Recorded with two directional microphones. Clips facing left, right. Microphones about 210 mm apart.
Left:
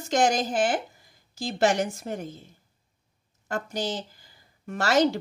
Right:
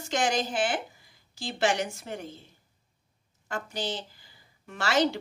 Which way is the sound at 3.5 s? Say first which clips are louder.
Left 4 dB; 40° left (ahead or behind).